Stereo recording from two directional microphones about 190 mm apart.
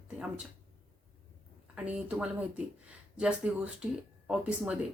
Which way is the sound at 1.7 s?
5° right (ahead or behind).